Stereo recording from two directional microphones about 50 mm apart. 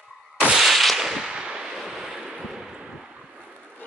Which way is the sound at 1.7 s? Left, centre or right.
Centre.